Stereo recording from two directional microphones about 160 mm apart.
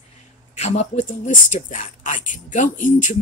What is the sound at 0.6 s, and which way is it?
Speech, 45° left (ahead or behind).